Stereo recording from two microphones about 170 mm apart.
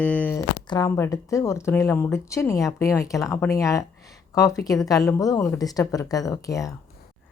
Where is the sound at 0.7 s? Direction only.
20° left (ahead or behind).